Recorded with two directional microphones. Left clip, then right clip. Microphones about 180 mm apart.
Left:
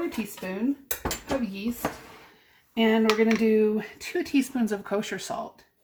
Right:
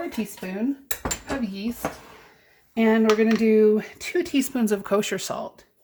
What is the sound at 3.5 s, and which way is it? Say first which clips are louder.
Speech: right 5 dB; 55° right (ahead or behind).